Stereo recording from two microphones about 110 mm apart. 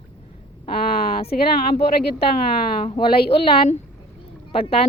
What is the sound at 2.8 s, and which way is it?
A woman's voice, 55° left (ahead or behind).